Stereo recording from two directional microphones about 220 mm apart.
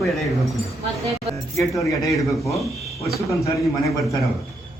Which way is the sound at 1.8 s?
15° left (ahead or behind).